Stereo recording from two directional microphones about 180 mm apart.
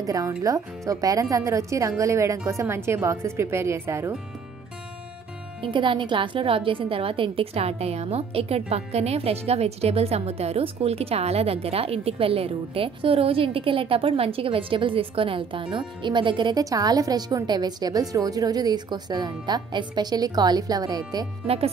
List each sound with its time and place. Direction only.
0.0 s a woman's voice: 20° right (ahead or behind)
5.6 s a woman's voice: 25° right (ahead or behind)